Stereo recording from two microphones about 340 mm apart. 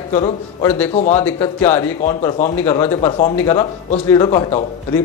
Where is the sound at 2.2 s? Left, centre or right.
Centre.